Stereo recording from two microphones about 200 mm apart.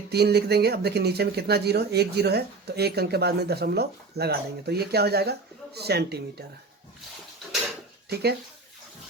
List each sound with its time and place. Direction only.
0.1 s speech: 55° right (ahead or behind)
8.1 s speech: 55° right (ahead or behind)